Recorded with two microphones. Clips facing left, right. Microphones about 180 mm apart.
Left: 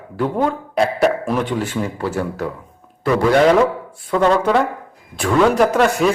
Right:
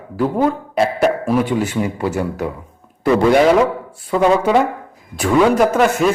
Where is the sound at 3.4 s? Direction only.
5° right (ahead or behind).